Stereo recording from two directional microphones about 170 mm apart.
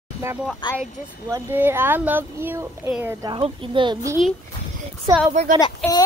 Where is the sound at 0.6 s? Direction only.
30° left (ahead or behind).